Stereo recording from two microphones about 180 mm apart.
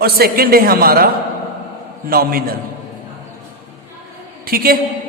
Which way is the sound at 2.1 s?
55° right (ahead or behind).